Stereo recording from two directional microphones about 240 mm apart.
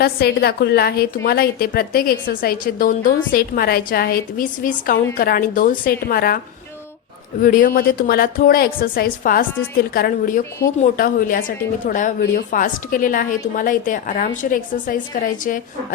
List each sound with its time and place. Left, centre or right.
0.0 s a woman's voice: left
7.4 s a woman's voice: left